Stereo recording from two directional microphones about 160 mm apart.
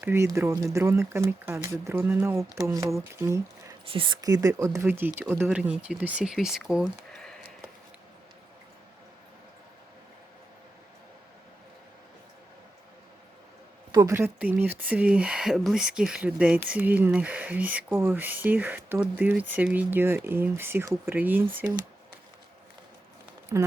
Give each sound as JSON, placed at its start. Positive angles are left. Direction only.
{"t": 0.0, "sound": "speech", "side_deg": -15}
{"t": 3.8, "sound": "speech", "side_deg": -35}
{"t": 13.9, "sound": "speech", "side_deg": -20}
{"t": 23.5, "sound": "speech", "side_deg": -20}